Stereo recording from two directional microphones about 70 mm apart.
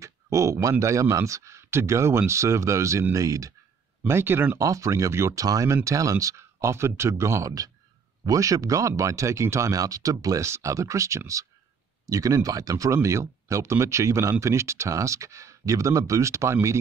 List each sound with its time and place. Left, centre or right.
0.0 s speech: right
4.1 s speech: right
4.6 s speech: right
5.4 s speech: right
8.3 s speech: right